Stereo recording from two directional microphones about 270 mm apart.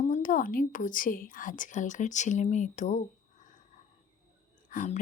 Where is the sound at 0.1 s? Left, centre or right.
Left.